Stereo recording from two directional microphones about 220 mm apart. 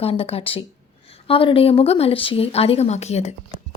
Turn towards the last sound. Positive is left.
turn(degrees=30)  # may be behind; listen again after turning